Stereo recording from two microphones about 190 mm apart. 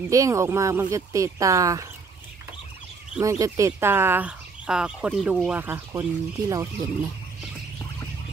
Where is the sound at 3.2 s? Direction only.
15° right (ahead or behind).